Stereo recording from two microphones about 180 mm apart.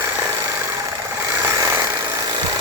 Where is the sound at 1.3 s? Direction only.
15° right (ahead or behind).